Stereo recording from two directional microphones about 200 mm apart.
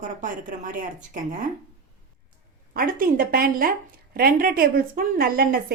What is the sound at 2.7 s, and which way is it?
A woman's voice, 45° right (ahead or behind).